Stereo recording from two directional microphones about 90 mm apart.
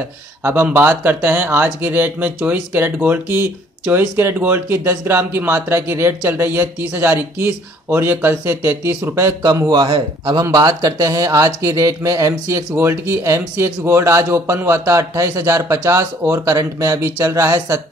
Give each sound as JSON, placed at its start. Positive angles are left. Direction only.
{"t": 0.4, "sound": "speech", "side_deg": -25}
{"t": 9.7, "sound": "speech", "side_deg": -70}
{"t": 10.5, "sound": "speech", "side_deg": -40}